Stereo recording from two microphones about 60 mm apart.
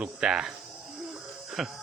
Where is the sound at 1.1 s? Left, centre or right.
Centre.